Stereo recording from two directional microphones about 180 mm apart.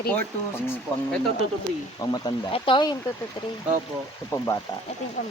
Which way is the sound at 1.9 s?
20° left (ahead or behind).